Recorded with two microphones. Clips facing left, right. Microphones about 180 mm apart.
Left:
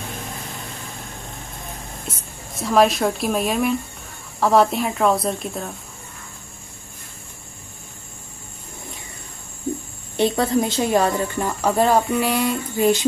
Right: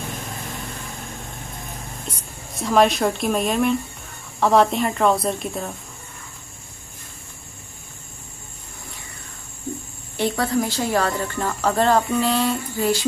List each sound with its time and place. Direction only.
2.0 s speech: centre (ahead or behind)
10.1 s speech: 20° left (ahead or behind)